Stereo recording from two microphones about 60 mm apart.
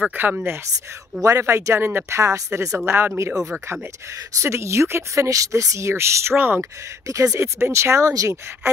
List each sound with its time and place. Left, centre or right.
0.1 s speech: right
1.2 s speech: right
2.0 s speech: right
2.8 s speech: right
4.4 s speech: right
6.3 s speech: right
7.1 s speech: right
8.1 s speech: right